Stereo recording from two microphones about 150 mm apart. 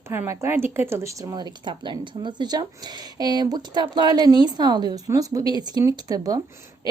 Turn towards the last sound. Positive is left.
turn(degrees=-25)  # may be behind; listen again after turning